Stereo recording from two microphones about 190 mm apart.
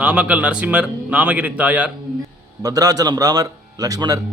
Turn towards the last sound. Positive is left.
turn(degrees=-20)  # may be behind; listen again after turning